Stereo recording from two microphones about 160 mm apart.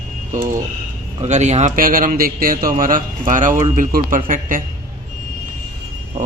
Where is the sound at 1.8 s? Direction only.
60° right (ahead or behind).